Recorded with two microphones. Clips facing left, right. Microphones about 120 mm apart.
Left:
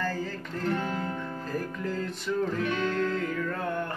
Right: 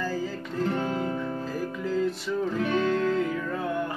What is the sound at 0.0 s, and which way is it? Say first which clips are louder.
Music: right 2 dB; 5° right (ahead or behind).